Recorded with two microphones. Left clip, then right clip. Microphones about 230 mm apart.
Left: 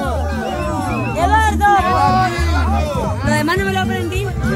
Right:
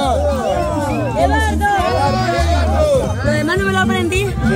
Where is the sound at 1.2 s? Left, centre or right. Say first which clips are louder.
Left 4 dB; left.